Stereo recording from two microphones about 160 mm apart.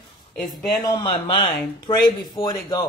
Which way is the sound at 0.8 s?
25° left (ahead or behind).